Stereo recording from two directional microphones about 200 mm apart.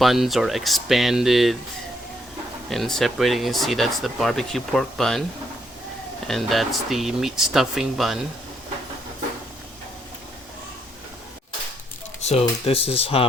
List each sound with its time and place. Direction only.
0.0 s speech: centre (ahead or behind)
2.6 s speech: centre (ahead or behind)
6.2 s speech: centre (ahead or behind)
12.2 s speech: 30° left (ahead or behind)